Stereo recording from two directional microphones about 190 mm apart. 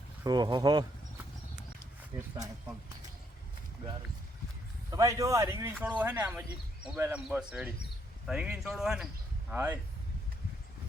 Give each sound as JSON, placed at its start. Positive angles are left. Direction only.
{"t": 0.3, "sound": "speech", "side_deg": -20}
{"t": 4.9, "sound": "speech", "side_deg": -15}